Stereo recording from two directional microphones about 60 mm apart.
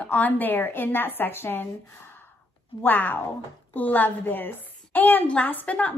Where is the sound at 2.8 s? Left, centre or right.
Left.